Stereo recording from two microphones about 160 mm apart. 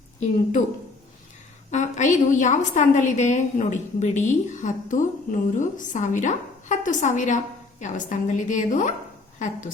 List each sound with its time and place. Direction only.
1.7 s a woman's voice: 50° left (ahead or behind)